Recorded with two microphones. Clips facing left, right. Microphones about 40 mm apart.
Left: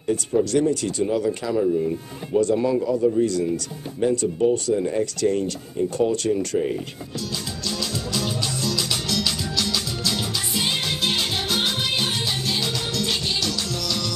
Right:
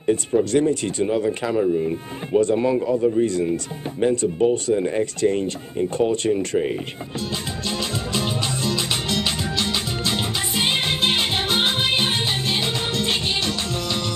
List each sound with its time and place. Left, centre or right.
0.0 s speech: right
7.6 s music: right